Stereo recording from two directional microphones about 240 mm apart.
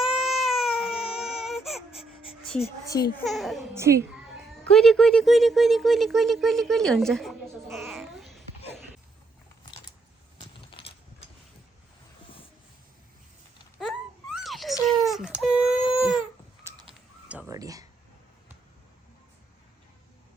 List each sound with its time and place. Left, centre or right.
0.0 s baby cry: centre
1.9 s baby cry: left
2.8 s speech: centre
3.2 s speech: centre
3.8 s a child's voice: centre
4.7 s speech: centre
8.0 s babbling: centre
10.4 s coin: left
14.3 s a sound: centre
16.0 s crying: centre
17.2 s a sound: centre